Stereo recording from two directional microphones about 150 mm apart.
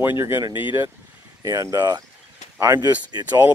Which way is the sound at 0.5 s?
30° left (ahead or behind).